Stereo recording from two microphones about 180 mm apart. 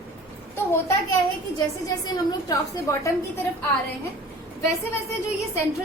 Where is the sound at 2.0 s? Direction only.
20° left (ahead or behind).